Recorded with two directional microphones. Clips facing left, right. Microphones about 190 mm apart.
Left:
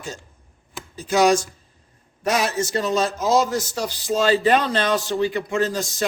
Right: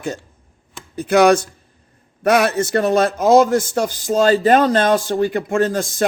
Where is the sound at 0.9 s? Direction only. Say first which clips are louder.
Right 5 dB; 60° right (ahead or behind).